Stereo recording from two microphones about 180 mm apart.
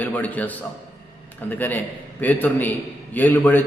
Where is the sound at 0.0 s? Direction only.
10° left (ahead or behind).